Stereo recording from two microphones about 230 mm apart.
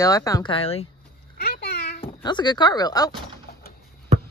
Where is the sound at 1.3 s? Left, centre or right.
Left.